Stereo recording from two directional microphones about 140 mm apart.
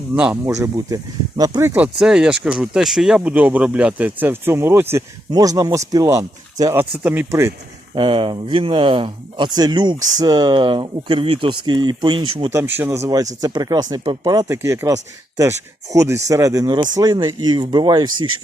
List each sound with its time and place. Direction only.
0.4 s speech: 20° right (ahead or behind)
1.7 s speech: 10° right (ahead or behind)
7.9 s speech: 35° right (ahead or behind)
12.5 s speech: 15° right (ahead or behind)